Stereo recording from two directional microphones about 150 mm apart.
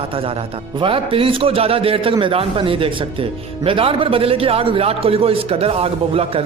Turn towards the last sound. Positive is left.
turn(degrees=-40)  # may be behind; listen again after turning